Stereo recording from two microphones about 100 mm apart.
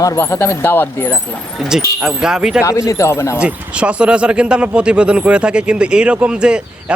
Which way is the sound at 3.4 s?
10° right (ahead or behind).